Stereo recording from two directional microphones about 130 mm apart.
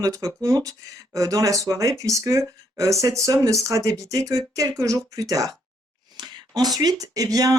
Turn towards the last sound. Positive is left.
turn(degrees=-30)  # may be behind; listen again after turning